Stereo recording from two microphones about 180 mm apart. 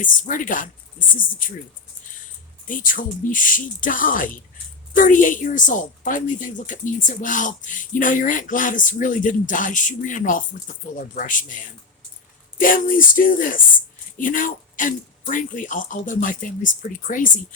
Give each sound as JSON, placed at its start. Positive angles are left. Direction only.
{"t": 0.0, "sound": "a woman's voice", "side_deg": 45}
{"t": 2.6, "sound": "a woman's voice", "side_deg": 50}